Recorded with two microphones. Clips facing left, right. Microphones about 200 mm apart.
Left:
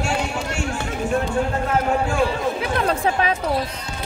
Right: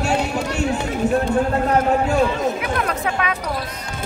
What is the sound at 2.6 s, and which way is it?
Chatter, 30° left (ahead or behind).